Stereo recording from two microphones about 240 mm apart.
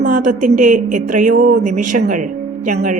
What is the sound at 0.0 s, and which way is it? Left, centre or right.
A woman's voice, right.